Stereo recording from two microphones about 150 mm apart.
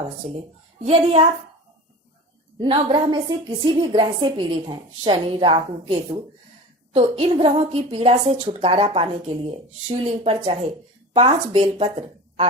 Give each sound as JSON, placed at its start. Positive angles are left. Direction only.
{"t": 0.2, "sound": "speech", "side_deg": -55}
{"t": 0.9, "sound": "a woman's voice", "side_deg": -40}
{"t": 2.6, "sound": "a woman's voice", "side_deg": -35}